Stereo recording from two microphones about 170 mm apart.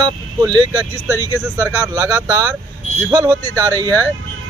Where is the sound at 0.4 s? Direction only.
25° right (ahead or behind).